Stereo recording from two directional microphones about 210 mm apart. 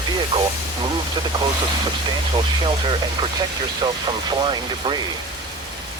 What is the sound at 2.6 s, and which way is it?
Speech, 25° right (ahead or behind).